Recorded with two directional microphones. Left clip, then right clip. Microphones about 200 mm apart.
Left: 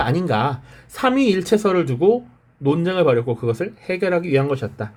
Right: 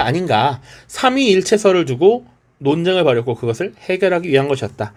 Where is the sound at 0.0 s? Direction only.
20° right (ahead or behind).